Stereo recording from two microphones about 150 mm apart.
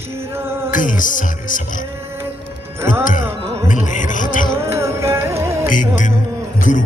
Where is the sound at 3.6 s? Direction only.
60° left (ahead or behind).